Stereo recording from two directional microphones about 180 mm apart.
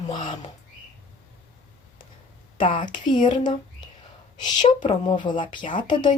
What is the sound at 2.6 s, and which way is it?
Speech, 45° left (ahead or behind).